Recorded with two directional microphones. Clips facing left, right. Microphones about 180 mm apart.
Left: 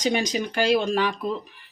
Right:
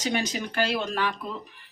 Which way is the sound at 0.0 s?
15° left (ahead or behind).